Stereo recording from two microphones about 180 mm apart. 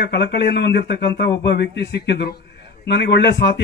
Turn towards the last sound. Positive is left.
turn(degrees=75)  # may be behind; listen again after turning